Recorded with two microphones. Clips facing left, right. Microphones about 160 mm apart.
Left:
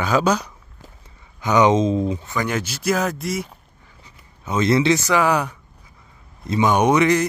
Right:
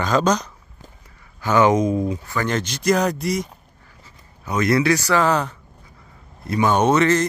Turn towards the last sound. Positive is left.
turn(degrees=15)  # may be behind; listen again after turning